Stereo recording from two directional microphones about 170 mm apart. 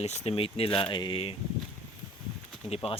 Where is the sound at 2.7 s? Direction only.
35° left (ahead or behind).